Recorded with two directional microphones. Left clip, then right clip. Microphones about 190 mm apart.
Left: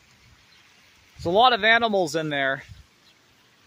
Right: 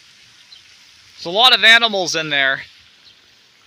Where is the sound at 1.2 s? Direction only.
25° left (ahead or behind).